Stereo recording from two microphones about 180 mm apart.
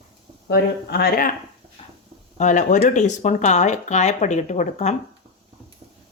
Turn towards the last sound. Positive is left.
turn(degrees=40)  # may be behind; listen again after turning